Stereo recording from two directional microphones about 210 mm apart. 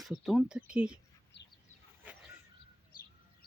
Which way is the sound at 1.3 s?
55° left (ahead or behind).